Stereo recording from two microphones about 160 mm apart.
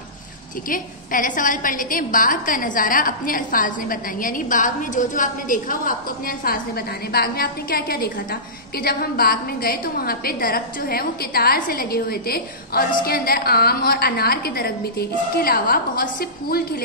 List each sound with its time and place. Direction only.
0.7 s a woman's voice: 55° left (ahead or behind)